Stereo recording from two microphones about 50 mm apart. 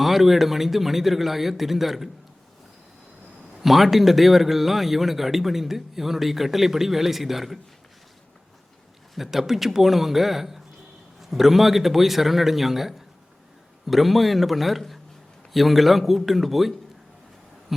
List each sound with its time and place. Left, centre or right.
0.0 s a man's voice: centre
3.6 s a man's voice: centre
9.1 s a man's voice: centre